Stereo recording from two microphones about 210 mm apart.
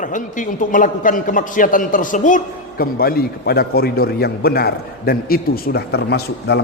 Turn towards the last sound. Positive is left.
turn(degrees=55)  # may be behind; listen again after turning